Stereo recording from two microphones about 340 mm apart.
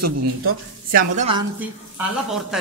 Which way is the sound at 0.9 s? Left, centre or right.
Centre.